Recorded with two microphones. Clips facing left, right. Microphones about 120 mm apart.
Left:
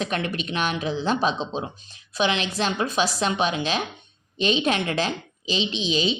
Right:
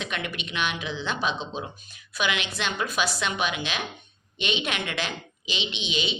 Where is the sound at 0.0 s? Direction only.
35° left (ahead or behind).